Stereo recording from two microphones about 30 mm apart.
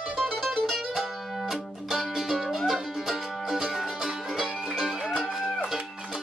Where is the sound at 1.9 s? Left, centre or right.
Centre.